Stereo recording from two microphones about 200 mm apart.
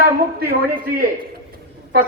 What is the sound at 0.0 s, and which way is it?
A man's voice, 50° right (ahead or behind).